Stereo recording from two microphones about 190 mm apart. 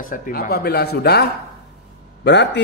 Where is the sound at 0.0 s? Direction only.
45° left (ahead or behind).